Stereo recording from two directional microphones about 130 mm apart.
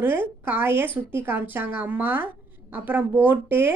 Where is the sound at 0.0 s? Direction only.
15° right (ahead or behind).